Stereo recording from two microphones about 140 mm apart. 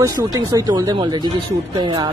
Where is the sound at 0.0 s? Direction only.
30° right (ahead or behind).